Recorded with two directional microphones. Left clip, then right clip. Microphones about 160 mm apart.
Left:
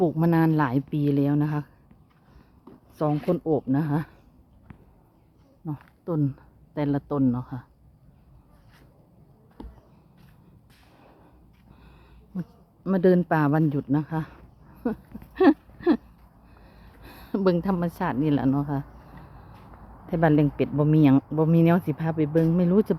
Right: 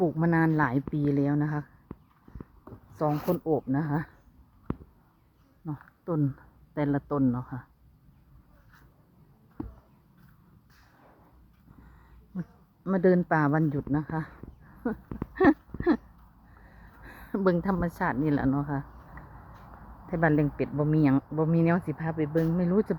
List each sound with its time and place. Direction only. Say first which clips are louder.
0.0 s speech: left 3 dB; 15° left (ahead or behind)
2.9 s speech: left 3 dB; 10° left (ahead or behind)
5.6 s speech: left 2 dB; centre (ahead or behind)
12.3 s speech: left 3 dB; 5° left (ahead or behind)
15.4 s a sound: left 3 dB; centre (ahead or behind)
17.0 s a woman's voice: left 3 dB; 10° left (ahead or behind)
20.1 s speech: left 4 dB; 15° left (ahead or behind)
21.9 s speech: left 4 dB; 30° left (ahead or behind)